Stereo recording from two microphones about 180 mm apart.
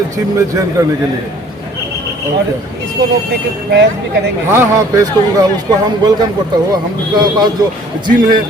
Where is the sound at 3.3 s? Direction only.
65° right (ahead or behind).